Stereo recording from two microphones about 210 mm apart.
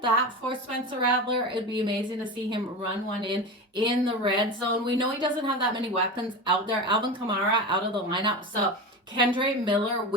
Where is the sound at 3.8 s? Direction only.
25° right (ahead or behind).